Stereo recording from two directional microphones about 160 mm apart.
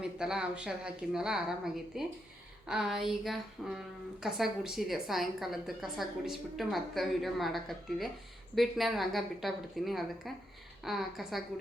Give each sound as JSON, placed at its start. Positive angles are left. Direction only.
{"t": 0.0, "sound": "a woman's voice", "side_deg": -5}